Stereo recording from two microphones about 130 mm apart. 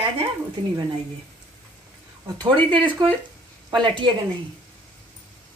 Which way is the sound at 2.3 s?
40° right (ahead or behind).